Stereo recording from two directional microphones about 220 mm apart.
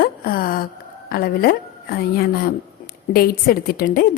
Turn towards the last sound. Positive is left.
turn(degrees=40)  # may be behind; listen again after turning